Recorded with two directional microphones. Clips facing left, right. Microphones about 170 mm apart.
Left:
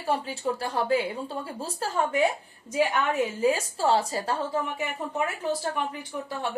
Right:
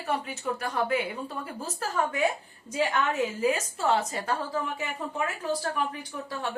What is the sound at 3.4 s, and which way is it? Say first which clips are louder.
Speech: left 3 dB; 30° left (ahead or behind).